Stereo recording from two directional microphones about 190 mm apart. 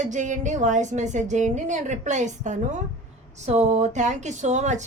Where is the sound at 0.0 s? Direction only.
40° right (ahead or behind).